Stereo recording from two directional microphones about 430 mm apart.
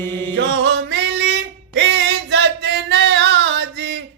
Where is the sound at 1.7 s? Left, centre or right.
Right.